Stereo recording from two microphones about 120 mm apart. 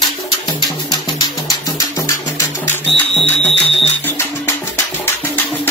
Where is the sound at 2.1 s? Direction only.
25° left (ahead or behind).